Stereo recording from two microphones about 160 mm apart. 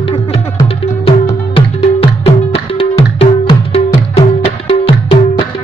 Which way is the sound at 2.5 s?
35° left (ahead or behind).